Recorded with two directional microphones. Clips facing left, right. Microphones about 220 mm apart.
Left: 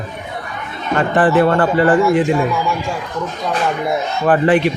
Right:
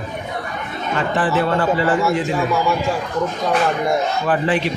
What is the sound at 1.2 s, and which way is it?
Speech, 55° left (ahead or behind).